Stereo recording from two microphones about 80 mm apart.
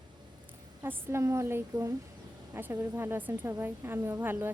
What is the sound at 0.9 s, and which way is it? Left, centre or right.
A woman's voice, right.